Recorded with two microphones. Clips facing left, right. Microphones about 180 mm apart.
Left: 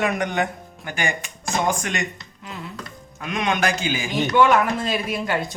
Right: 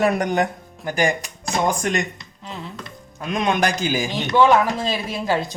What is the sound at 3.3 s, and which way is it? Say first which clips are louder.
Speech: right 2 dB; 40° right (ahead or behind).